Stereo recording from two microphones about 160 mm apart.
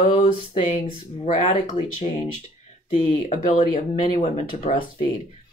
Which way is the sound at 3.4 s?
40° left (ahead or behind).